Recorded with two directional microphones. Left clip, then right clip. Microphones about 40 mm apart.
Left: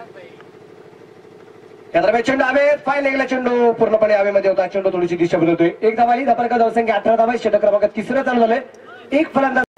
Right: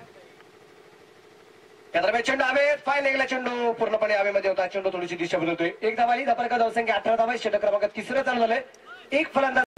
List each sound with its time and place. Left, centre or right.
1.9 s a man's voice: right